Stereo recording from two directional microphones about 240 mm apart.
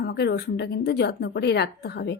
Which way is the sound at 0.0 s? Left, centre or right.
Left.